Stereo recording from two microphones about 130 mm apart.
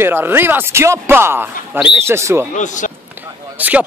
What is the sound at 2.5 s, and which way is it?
Speech, 70° left (ahead or behind).